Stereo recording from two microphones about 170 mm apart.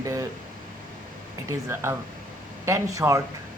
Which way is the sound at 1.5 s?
15° right (ahead or behind).